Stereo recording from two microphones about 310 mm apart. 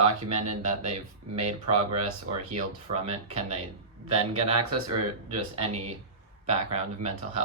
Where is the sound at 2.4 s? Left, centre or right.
Right.